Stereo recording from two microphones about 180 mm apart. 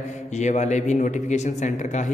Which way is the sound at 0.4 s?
40° left (ahead or behind).